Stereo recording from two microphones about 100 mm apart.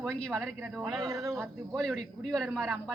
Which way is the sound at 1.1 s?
30° right (ahead or behind).